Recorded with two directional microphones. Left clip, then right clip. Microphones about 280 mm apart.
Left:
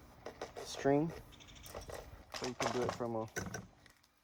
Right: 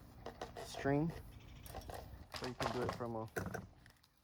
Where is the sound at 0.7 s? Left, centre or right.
Left.